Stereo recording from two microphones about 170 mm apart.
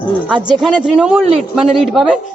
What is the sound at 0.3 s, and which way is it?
Speech, 25° right (ahead or behind).